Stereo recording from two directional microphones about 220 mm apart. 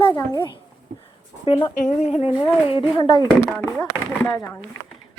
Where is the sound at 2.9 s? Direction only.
20° left (ahead or behind).